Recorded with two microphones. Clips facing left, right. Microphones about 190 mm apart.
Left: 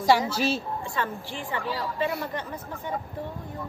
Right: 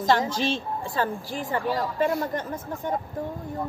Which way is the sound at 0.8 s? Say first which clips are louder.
Right 3 dB; 35° right (ahead or behind).